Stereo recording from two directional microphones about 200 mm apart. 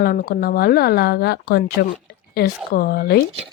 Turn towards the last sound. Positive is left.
turn(degrees=50)  # may be behind; listen again after turning